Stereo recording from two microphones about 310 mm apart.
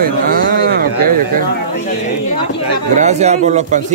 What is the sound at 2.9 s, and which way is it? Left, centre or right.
Speech, right.